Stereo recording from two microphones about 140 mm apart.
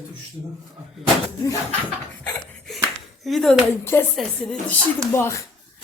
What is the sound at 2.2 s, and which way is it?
Laughter, 5° left (ahead or behind).